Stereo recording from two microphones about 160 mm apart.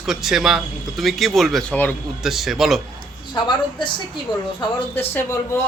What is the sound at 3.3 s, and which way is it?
A woman's voice, 30° left (ahead or behind).